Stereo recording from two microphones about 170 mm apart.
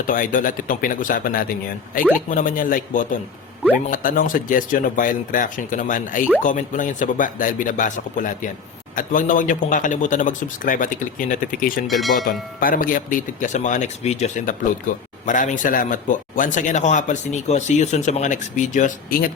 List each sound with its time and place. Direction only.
0.1 s speech: 50° left (ahead or behind)
11.9 s speech: centre (ahead or behind)
12.2 s speech: 55° left (ahead or behind)